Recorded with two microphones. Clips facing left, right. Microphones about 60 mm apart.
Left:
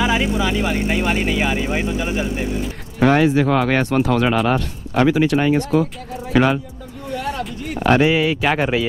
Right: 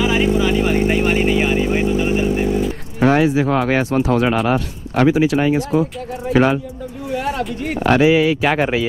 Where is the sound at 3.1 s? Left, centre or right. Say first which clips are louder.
Left 1 dB; left.